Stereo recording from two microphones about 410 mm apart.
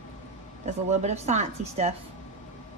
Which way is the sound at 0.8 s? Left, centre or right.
Centre.